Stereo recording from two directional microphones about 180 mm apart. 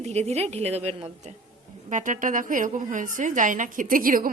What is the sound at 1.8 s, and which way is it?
A woman's voice, 45° right (ahead or behind).